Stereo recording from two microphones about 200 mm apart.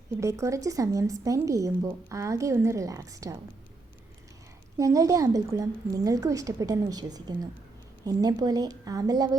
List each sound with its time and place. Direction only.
0.2 s a woman's voice: 15° right (ahead or behind)
4.8 s a woman's voice: 15° right (ahead or behind)